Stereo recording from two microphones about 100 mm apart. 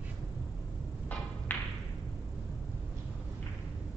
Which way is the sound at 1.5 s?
15° left (ahead or behind).